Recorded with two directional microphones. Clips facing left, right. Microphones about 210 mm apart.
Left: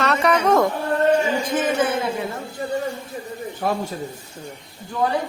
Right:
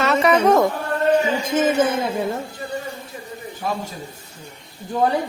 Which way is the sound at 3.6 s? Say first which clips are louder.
Left 3 dB; 55° left (ahead or behind).